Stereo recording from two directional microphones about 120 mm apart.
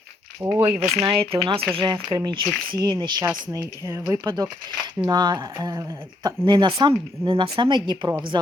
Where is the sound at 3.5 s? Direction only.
25° right (ahead or behind).